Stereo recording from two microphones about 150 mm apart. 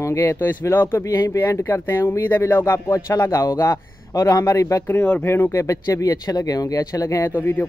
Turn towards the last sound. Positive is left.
turn(degrees=15)  # may be behind; listen again after turning